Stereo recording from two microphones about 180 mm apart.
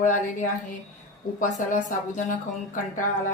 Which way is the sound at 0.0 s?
45° left (ahead or behind).